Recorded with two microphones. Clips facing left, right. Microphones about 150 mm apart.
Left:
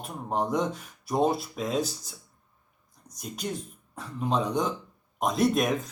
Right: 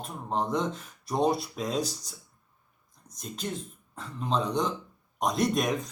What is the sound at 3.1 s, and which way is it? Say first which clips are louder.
Speech: left 1 dB; 10° left (ahead or behind).